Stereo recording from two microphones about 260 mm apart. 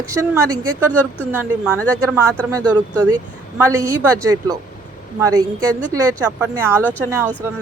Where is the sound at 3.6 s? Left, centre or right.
Centre.